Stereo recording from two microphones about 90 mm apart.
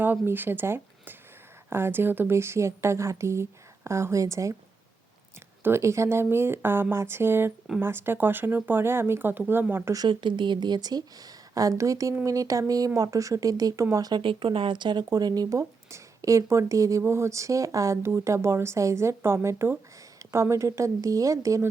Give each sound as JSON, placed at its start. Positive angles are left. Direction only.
{"t": 0.0, "sound": "speech", "side_deg": -20}
{"t": 5.6, "sound": "speech", "side_deg": -30}
{"t": 10.1, "sound": "a woman's voice", "side_deg": -60}
{"t": 14.1, "sound": "speech", "side_deg": -75}